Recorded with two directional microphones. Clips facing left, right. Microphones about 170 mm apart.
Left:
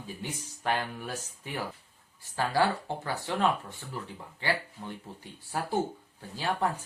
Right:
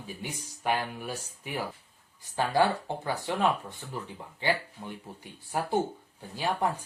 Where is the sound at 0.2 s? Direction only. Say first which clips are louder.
Even; 15° right (ahead or behind).